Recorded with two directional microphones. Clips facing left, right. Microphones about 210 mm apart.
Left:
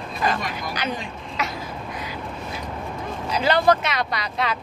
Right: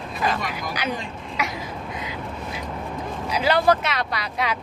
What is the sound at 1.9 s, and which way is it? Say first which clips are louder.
Crow: even; 20° right (ahead or behind).